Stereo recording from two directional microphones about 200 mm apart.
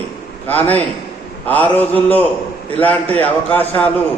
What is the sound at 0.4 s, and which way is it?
A man's voice, 10° left (ahead or behind).